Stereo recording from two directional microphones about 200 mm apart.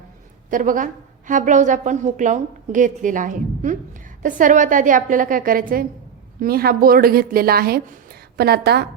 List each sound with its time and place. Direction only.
0.5 s a woman's voice: 40° right (ahead or behind)